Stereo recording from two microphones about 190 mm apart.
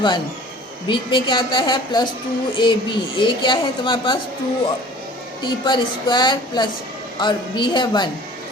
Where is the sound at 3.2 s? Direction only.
25° left (ahead or behind).